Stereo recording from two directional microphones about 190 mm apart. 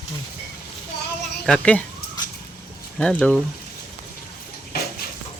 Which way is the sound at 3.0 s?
5° left (ahead or behind).